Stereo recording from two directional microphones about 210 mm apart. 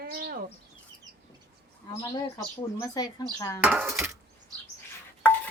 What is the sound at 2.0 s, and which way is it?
Speech, 15° left (ahead or behind).